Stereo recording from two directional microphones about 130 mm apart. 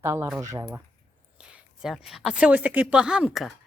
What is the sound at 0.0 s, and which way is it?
Speech, 20° right (ahead or behind).